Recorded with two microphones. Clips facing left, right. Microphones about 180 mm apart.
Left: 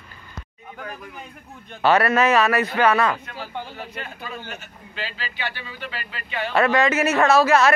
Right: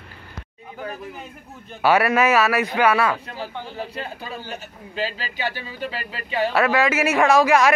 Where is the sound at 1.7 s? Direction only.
10° right (ahead or behind).